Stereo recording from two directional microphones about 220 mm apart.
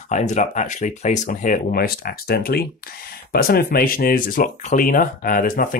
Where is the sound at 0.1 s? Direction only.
35° left (ahead or behind).